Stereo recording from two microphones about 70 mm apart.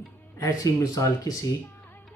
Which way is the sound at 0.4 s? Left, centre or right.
Left.